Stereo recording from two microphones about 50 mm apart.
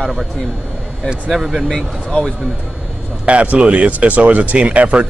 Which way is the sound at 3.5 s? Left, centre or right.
Right.